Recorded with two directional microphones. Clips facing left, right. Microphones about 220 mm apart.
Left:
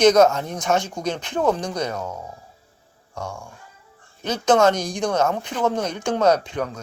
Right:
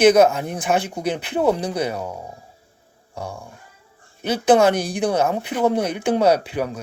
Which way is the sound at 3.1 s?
35° right (ahead or behind).